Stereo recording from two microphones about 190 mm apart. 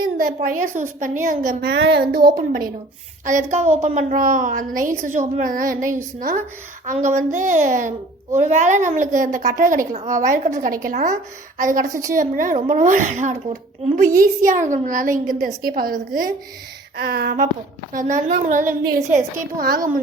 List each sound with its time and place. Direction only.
0.0 s a sound: 45° right (ahead or behind)
0.4 s speech: 45° right (ahead or behind)
1.7 s speech: 65° right (ahead or behind)
2.3 s a child's voice: 45° right (ahead or behind)
11.9 s a woman's voice: 15° right (ahead or behind)
12.1 s speech: 45° right (ahead or behind)
17.9 s speech: 40° right (ahead or behind)